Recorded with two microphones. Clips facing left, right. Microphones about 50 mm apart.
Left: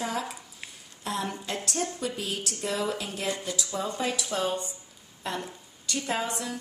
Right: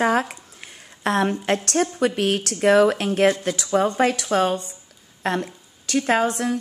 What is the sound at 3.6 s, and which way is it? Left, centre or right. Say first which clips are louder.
A woman's voice: right 12 dB; right.